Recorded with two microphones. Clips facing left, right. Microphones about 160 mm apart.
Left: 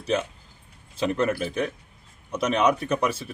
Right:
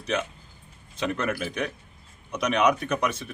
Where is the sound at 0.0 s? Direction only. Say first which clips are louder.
Left 3 dB; 30° left (ahead or behind).